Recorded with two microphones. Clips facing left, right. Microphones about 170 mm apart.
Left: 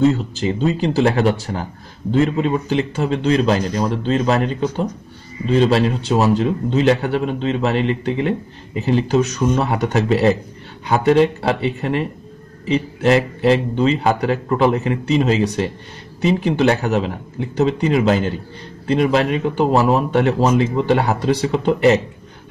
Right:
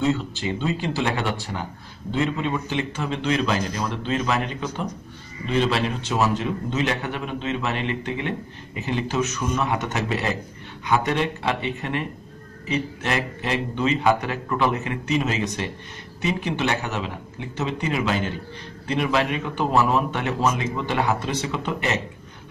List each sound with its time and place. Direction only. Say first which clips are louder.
0.1 s a man's voice: left 4 dB; 40° left (ahead or behind)